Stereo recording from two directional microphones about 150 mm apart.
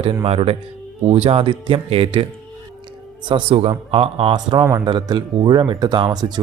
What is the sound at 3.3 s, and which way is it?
Speech, 35° right (ahead or behind).